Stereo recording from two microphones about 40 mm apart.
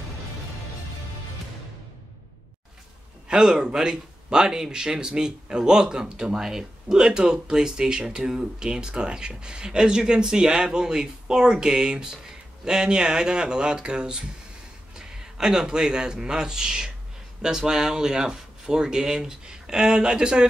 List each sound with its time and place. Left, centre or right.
3.3 s a man's voice: right